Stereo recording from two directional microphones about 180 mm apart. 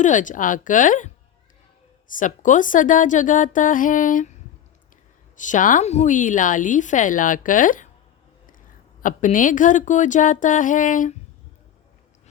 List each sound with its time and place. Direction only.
0.0 s a woman's voice: 45° left (ahead or behind)
5.4 s a woman's voice: 45° left (ahead or behind)
9.0 s a woman's voice: 45° left (ahead or behind)